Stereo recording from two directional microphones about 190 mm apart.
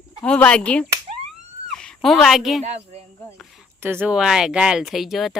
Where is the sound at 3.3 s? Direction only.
Centre (ahead or behind).